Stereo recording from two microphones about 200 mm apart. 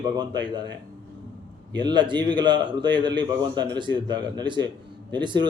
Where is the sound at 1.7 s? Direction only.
20° right (ahead or behind).